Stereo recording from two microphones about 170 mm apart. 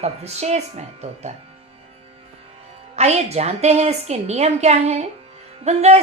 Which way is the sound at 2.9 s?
40° right (ahead or behind).